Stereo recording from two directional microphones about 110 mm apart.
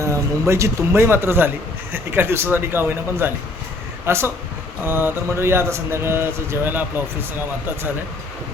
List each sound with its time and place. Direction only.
0.0 s speech: 25° right (ahead or behind)